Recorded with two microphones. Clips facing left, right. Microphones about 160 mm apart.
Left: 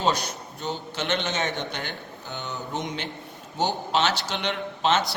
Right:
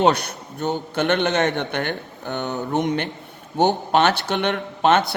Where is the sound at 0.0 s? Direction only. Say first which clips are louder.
Right 7 dB; 60° right (ahead or behind).